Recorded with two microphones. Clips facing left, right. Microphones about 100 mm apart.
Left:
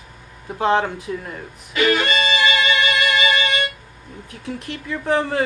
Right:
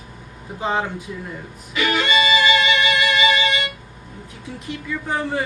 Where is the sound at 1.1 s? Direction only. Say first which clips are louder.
Left 5 dB; 90° left.